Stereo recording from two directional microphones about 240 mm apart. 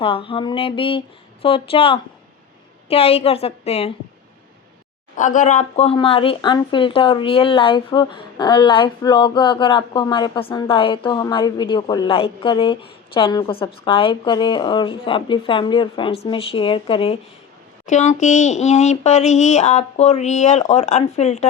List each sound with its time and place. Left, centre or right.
0.0 s speech: left
5.1 s speech: left